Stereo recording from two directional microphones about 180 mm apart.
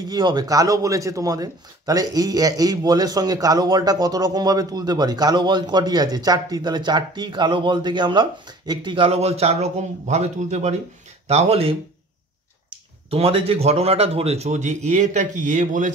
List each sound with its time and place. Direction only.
0.1 s speech: 25° right (ahead or behind)
13.1 s speech: 30° right (ahead or behind)